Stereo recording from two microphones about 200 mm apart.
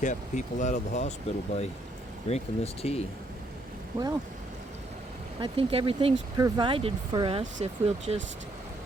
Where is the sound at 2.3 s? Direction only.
30° left (ahead or behind).